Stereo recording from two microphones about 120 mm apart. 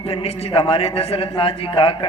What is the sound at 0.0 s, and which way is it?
A man's voice, 55° left (ahead or behind).